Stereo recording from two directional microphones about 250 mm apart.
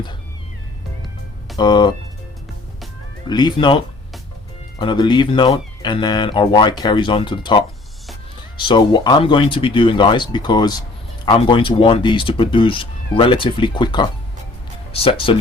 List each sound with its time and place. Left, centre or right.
1.5 s speech: centre
3.2 s speech: centre
4.8 s speech: centre